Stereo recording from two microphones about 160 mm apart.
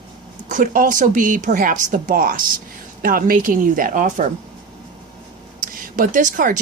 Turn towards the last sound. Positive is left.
turn(degrees=-55)  # may be behind; listen again after turning